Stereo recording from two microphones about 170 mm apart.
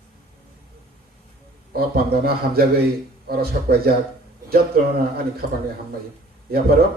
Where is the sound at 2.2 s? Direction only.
65° right (ahead or behind).